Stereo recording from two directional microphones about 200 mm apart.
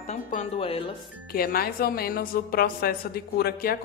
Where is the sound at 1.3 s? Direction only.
50° left (ahead or behind).